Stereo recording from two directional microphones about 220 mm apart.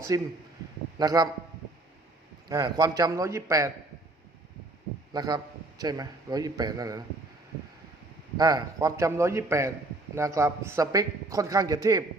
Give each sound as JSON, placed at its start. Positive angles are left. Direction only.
{"t": 0.1, "sound": "a man's voice", "side_deg": -15}
{"t": 2.5, "sound": "a man's voice", "side_deg": -15}
{"t": 5.1, "sound": "a man's voice", "side_deg": -15}
{"t": 8.4, "sound": "a man's voice", "side_deg": -15}